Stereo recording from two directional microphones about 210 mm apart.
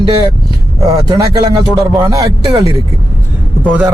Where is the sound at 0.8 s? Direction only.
20° right (ahead or behind).